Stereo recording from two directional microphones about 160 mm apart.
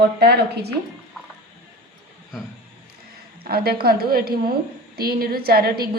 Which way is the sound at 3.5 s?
75° right (ahead or behind).